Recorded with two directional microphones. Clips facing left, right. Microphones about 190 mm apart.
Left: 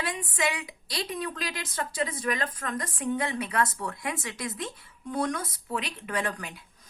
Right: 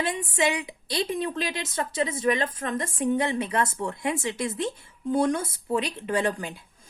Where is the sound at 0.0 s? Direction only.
25° right (ahead or behind).